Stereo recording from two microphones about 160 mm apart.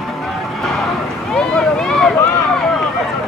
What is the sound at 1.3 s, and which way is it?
Run, 5° left (ahead or behind).